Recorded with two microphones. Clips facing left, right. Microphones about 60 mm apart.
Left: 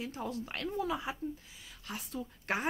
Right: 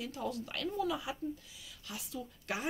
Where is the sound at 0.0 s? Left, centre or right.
Left.